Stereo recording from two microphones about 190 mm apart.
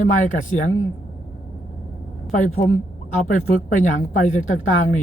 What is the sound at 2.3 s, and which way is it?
A woman's voice, 40° left (ahead or behind).